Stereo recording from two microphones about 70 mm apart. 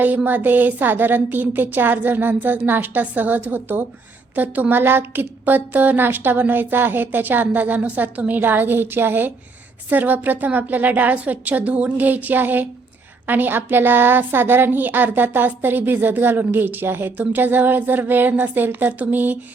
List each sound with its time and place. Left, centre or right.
0.3 s a woman's voice: right